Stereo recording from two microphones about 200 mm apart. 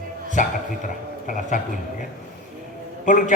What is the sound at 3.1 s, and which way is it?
Speech, 40° left (ahead or behind).